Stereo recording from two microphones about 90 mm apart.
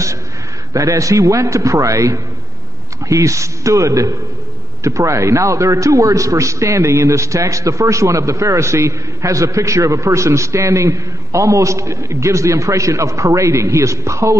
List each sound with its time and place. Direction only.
0.7 s a man's voice: 40° right (ahead or behind)